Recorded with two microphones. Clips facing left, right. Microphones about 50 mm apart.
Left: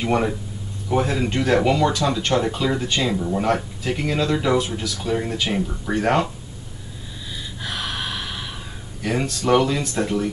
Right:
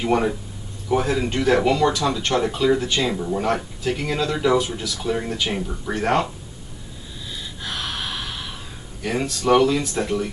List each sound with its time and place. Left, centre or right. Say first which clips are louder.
0.0 s speech: right 1 dB; centre
3.3 s speech: left 1 dB; centre
4.6 s speech: even; centre
5.0 s speech: even; centre
7.6 s gasp: left 1 dB; centre
9.0 s speech: even; centre